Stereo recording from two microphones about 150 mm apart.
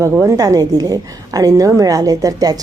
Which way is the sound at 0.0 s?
20° right (ahead or behind).